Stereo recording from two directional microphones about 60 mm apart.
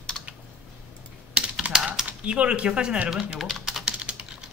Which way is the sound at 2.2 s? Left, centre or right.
Centre.